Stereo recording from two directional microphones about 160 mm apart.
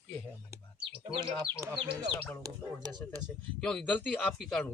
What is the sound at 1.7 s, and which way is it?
Speech, 30° right (ahead or behind).